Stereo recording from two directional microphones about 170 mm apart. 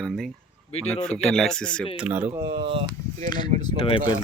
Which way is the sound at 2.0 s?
10° right (ahead or behind).